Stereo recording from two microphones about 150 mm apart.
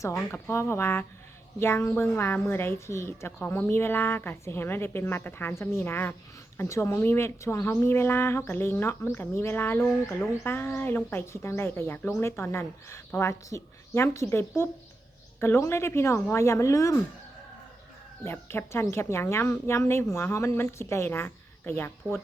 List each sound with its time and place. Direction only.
0.0 s a woman's voice: 20° left (ahead or behind)
18.2 s a woman's voice: 15° left (ahead or behind)